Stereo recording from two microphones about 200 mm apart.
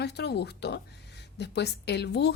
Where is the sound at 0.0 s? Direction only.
55° left (ahead or behind).